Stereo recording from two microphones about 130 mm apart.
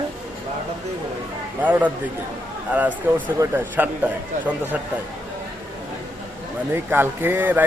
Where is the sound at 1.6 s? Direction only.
15° right (ahead or behind).